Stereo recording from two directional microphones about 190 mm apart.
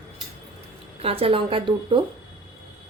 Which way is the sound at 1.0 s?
30° right (ahead or behind).